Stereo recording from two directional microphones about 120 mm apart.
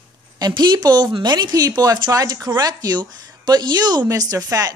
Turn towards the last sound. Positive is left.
turn(degrees=-30)  # may be behind; listen again after turning